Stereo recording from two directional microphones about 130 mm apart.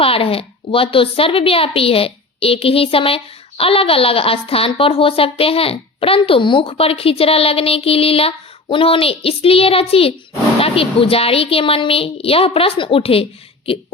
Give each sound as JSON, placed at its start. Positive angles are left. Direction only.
{"t": 0.0, "sound": "speech", "side_deg": 45}